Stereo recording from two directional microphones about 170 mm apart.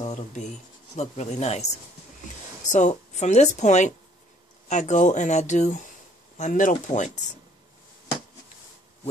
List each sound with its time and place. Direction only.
0.0 s writing: 45° left (ahead or behind)
0.9 s speech: 40° left (ahead or behind)
2.7 s speech: 45° left (ahead or behind)